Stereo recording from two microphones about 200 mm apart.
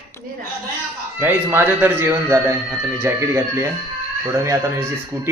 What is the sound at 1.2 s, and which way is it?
Speech, 10° right (ahead or behind).